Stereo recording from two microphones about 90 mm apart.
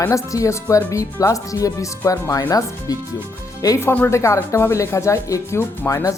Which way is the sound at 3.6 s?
40° left (ahead or behind).